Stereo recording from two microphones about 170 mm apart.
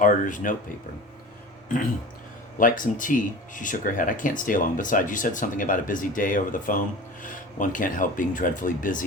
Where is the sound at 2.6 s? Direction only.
50° left (ahead or behind).